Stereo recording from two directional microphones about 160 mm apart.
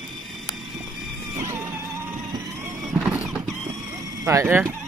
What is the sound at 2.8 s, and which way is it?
Squeal, 5° right (ahead or behind).